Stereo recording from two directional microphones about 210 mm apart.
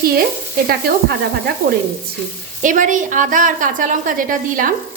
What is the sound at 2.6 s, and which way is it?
A woman's voice, 40° right (ahead or behind).